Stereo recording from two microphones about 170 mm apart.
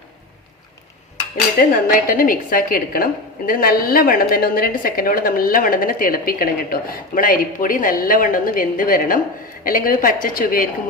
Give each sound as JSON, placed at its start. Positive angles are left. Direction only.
{"t": 1.9, "sound": "a woman's voice", "side_deg": 55}